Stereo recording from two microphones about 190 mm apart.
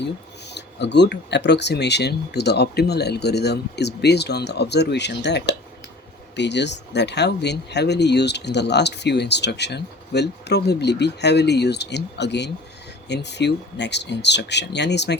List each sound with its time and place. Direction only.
0.0 s speech: 65° left (ahead or behind)